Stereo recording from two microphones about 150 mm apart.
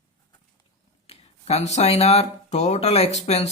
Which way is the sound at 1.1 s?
45° left (ahead or behind).